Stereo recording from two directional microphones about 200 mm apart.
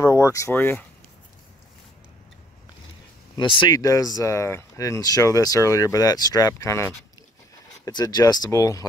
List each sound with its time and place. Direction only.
0.0 s speech: 15° left (ahead or behind)
3.3 s speech: 25° left (ahead or behind)